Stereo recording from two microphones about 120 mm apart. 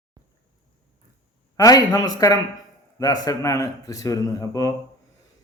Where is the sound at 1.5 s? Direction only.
30° left (ahead or behind).